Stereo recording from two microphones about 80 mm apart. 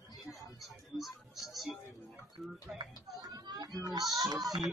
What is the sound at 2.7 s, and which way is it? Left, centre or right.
Speech, centre.